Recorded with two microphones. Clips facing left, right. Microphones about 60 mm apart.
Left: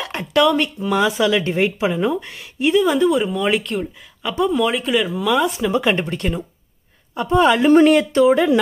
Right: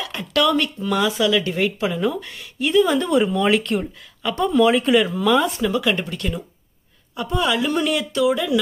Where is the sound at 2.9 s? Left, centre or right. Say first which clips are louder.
Left 2 dB; centre.